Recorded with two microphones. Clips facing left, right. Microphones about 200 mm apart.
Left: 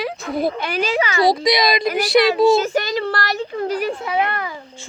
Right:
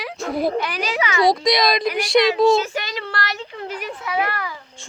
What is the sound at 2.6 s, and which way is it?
Child singing, 40° left (ahead or behind).